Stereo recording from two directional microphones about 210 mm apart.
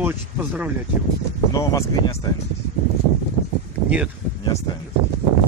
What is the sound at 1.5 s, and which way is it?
Speech, 15° left (ahead or behind).